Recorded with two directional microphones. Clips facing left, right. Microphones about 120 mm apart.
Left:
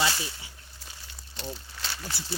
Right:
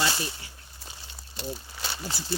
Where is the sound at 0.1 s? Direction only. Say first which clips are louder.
Right 2 dB; 20° right (ahead or behind).